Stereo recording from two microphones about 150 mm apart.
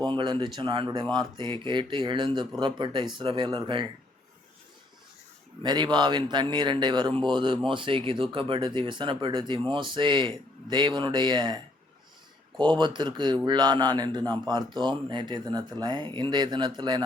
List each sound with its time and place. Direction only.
0.0 s speech: 30° right (ahead or behind)
5.6 s speech: 30° right (ahead or behind)